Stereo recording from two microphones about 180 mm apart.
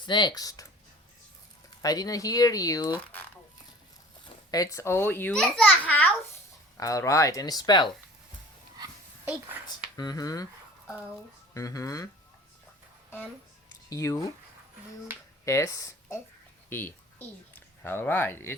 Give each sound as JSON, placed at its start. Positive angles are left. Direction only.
{"t": 0.0, "sound": "speech", "side_deg": 25}
{"t": 1.8, "sound": "a child's voice", "side_deg": 20}
{"t": 4.5, "sound": "a child's voice", "side_deg": 20}
{"t": 9.6, "sound": "a sound", "side_deg": 20}
{"t": 11.5, "sound": "speech", "side_deg": 20}
{"t": 13.9, "sound": "speech", "side_deg": 15}
{"t": 15.4, "sound": "speech", "side_deg": 15}